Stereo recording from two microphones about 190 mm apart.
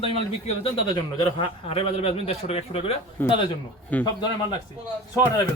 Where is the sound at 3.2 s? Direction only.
10° left (ahead or behind).